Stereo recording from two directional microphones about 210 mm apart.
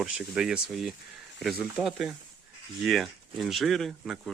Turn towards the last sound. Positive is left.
turn(degrees=0)  # may be behind; listen again after turning